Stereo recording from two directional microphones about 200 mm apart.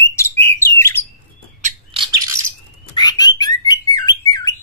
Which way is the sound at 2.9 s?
20° left (ahead or behind).